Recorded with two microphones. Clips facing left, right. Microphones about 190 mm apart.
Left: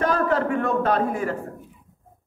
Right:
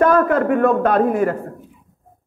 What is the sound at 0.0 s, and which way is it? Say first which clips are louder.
A man's voice: right 7 dB; 55° right (ahead or behind).